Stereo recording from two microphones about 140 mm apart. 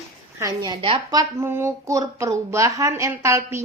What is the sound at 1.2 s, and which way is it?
Speech, 20° right (ahead or behind).